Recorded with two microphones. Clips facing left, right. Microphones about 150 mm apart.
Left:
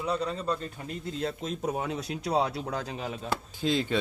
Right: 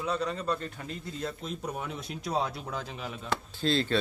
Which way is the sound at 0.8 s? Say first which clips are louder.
Left 1 dB; 20° left (ahead or behind).